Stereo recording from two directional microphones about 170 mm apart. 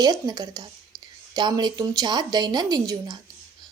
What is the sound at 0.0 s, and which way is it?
A woman's voice, 25° right (ahead or behind).